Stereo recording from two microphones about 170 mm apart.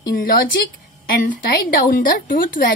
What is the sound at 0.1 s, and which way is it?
A woman's voice, 55° left (ahead or behind).